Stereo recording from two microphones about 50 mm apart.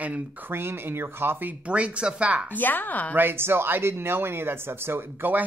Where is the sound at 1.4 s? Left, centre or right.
Right.